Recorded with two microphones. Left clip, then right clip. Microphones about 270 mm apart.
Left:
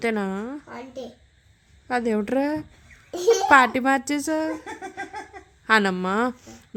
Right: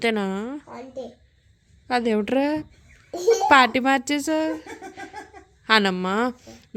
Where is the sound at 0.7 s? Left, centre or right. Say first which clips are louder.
Right 1 dB; left.